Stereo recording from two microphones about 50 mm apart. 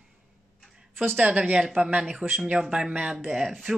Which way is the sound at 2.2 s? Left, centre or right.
Right.